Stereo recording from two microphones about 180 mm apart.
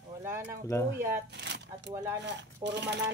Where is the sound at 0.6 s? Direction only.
20° left (ahead or behind).